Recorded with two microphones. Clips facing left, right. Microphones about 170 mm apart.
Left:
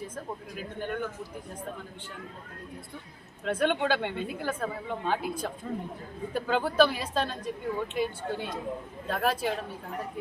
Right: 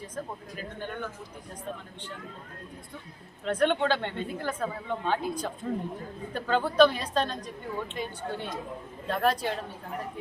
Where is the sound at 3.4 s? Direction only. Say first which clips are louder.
Right 1 dB; 10° left (ahead or behind).